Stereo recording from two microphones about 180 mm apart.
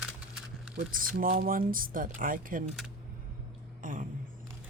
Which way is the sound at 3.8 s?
45° right (ahead or behind).